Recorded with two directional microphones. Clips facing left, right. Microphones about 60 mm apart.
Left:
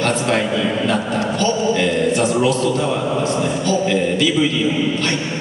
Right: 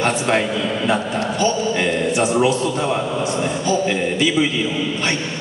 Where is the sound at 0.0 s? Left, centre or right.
Right.